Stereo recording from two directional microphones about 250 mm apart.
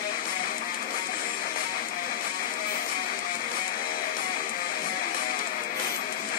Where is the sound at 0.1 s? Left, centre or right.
Left.